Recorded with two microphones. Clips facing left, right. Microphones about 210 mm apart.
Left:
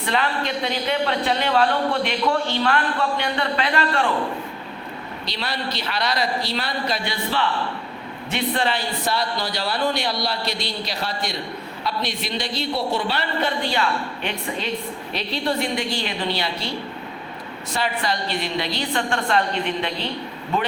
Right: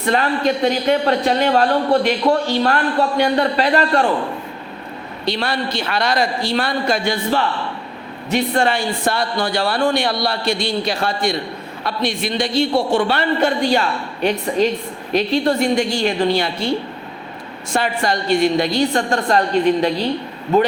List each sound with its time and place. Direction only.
0.0 s speech: 45° right (ahead or behind)
5.2 s speech: 50° right (ahead or behind)
17.7 s a man's voice: 45° right (ahead or behind)